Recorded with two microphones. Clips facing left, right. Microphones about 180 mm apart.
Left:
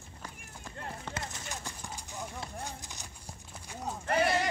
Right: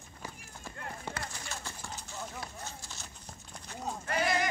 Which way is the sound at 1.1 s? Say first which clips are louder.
Left 1 dB; 20° left (ahead or behind).